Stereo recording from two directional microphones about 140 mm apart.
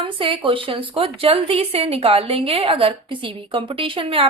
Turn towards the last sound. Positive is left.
turn(degrees=-40)  # may be behind; listen again after turning